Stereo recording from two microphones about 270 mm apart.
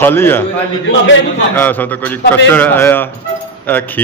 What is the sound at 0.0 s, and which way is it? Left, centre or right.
Speech, centre.